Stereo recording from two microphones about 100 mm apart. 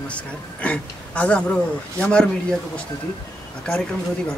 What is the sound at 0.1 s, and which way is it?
Speech, 15° left (ahead or behind).